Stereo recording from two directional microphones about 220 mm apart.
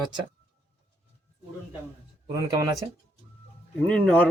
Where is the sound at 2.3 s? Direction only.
15° right (ahead or behind).